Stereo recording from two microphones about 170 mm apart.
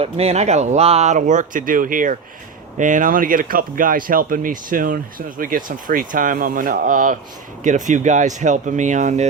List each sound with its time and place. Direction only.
0.0 s speech: 35° right (ahead or behind)